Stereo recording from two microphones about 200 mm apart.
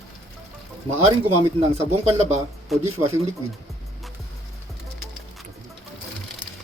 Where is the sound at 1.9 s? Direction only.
30° right (ahead or behind).